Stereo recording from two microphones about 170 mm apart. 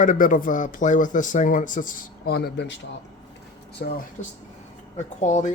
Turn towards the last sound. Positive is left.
turn(degrees=45)  # may be behind; listen again after turning